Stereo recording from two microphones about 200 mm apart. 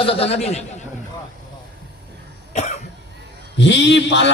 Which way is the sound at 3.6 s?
60° left (ahead or behind).